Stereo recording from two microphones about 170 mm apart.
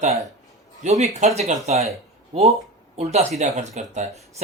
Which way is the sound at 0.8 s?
40° right (ahead or behind).